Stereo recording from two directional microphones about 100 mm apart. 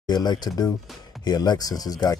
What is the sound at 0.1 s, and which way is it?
Speech, 45° left (ahead or behind).